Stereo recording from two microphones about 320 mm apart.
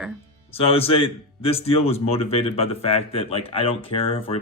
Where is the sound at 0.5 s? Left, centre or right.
Centre.